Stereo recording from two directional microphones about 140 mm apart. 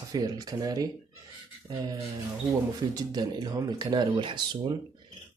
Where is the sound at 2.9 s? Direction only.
30° right (ahead or behind).